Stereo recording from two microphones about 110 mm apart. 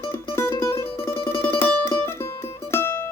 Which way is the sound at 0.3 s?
25° left (ahead or behind).